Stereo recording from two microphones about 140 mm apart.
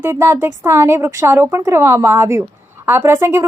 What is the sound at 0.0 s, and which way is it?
Speech, 20° right (ahead or behind).